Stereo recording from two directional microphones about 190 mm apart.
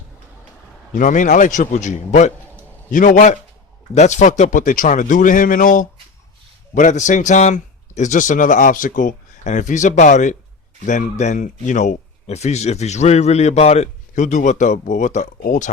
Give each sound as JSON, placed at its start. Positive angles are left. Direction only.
{"t": 0.9, "sound": "speech", "side_deg": 40}